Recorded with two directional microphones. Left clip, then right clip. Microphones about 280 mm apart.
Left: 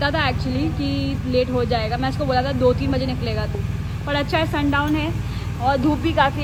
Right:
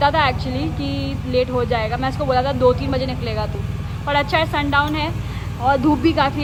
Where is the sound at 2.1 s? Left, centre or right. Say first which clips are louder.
Right 4 dB; right.